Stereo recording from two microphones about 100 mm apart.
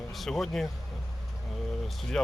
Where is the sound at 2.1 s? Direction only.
5° left (ahead or behind).